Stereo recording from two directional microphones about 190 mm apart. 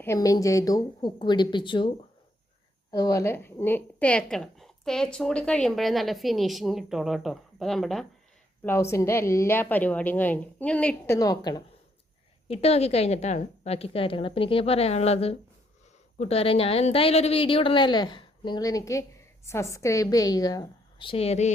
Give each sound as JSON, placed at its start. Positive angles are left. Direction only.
{"t": 0.0, "sound": "speech", "side_deg": 15}
{"t": 2.9, "sound": "a woman's voice", "side_deg": 20}
{"t": 8.6, "sound": "a woman's voice", "side_deg": 15}
{"t": 12.5, "sound": "a woman's voice", "side_deg": 35}